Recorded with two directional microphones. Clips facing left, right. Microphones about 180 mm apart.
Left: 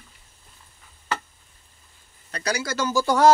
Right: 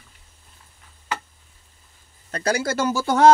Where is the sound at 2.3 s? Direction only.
50° right (ahead or behind).